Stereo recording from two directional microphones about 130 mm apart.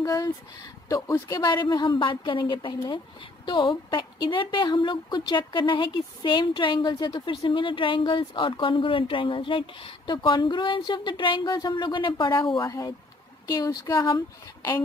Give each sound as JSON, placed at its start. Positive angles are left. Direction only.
{"t": 0.0, "sound": "a woman's voice", "side_deg": 30}
{"t": 12.6, "sound": "speech", "side_deg": 30}